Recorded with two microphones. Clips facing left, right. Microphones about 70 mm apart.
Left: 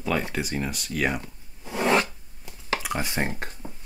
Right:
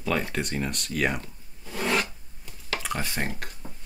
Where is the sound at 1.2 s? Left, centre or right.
Left.